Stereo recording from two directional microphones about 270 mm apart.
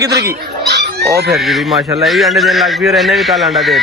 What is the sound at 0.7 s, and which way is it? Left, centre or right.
Chicken, right.